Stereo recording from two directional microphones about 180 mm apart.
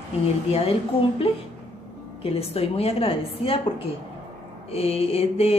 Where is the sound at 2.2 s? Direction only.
30° left (ahead or behind).